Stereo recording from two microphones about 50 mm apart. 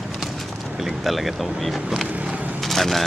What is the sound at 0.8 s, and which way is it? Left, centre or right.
Speech, centre.